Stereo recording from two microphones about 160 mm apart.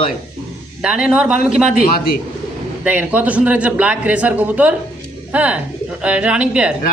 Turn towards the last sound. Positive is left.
turn(degrees=-5)  # may be behind; listen again after turning